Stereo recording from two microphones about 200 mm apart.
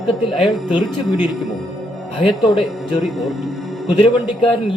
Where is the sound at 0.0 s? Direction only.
Centre (ahead or behind).